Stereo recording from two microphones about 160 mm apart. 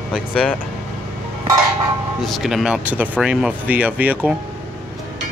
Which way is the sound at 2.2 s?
Centre (ahead or behind).